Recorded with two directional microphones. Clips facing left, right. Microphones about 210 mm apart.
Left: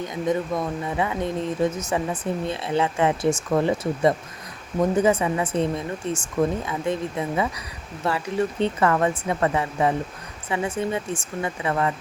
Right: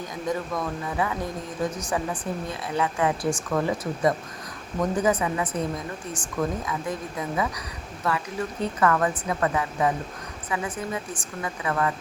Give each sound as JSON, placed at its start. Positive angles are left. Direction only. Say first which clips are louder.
{"t": 0.0, "sound": "speech", "louder": "left 5 dB", "side_deg": 25}